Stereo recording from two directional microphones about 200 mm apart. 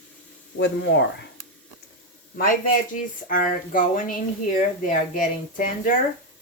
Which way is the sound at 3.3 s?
45° left (ahead or behind).